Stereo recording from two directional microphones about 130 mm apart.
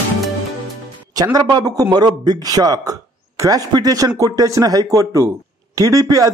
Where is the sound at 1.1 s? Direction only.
30° right (ahead or behind).